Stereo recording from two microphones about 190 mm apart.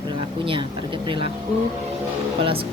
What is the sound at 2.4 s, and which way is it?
Speech, 30° right (ahead or behind).